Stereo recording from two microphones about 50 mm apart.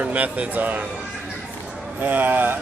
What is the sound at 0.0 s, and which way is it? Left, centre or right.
Speech, right.